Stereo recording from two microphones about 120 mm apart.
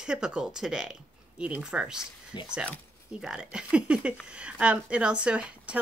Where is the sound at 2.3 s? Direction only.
40° left (ahead or behind).